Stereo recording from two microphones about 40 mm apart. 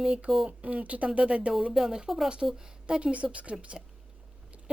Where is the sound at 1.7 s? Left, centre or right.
Centre.